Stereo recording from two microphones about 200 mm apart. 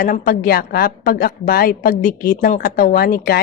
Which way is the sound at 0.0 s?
45° left (ahead or behind).